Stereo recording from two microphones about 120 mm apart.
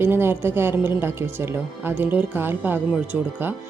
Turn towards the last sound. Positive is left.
turn(degrees=-15)  # may be behind; listen again after turning